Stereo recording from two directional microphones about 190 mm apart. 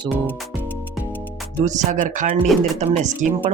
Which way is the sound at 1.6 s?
40° right (ahead or behind).